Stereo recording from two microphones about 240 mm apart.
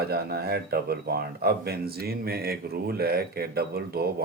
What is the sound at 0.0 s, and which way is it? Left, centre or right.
Speech, right.